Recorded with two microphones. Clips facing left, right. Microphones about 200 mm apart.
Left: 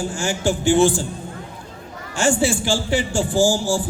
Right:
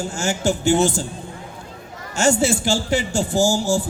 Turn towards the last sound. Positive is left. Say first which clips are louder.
# even
turn(degrees=-40)  # may be behind; listen again after turning